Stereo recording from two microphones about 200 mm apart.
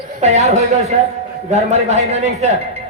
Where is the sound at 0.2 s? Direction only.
35° right (ahead or behind).